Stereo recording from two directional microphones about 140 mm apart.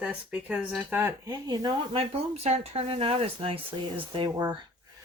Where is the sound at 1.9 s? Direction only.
45° right (ahead or behind).